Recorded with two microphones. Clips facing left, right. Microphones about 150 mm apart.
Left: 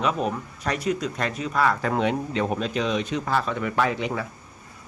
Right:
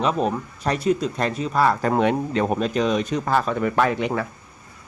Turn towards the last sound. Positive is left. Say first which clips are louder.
# right 3 dB
turn(degrees=-55)  # may be behind; listen again after turning